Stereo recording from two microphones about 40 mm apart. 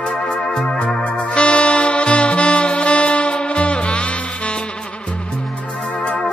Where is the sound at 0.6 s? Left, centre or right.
Left.